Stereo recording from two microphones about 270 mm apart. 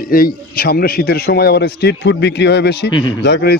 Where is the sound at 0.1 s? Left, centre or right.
Left.